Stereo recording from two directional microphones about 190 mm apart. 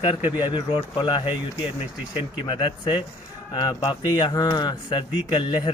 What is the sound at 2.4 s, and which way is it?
Speech, 25° left (ahead or behind).